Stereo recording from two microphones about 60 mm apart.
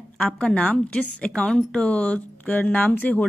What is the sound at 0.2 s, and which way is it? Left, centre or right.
A woman's voice, centre.